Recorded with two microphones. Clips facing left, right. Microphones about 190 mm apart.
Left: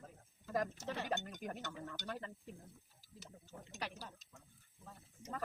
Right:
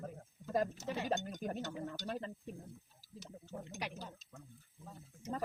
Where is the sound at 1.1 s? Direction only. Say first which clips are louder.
Right 4 dB; 25° right (ahead or behind).